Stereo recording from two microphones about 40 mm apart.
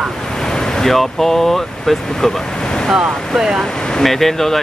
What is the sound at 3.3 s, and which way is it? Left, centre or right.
Speech, centre.